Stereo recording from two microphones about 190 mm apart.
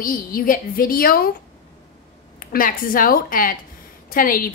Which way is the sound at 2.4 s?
50° left (ahead or behind).